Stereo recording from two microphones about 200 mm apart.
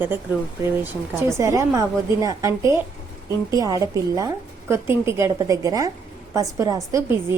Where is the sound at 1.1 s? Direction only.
15° right (ahead or behind).